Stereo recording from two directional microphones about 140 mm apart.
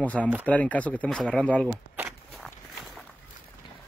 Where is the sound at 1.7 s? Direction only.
10° right (ahead or behind).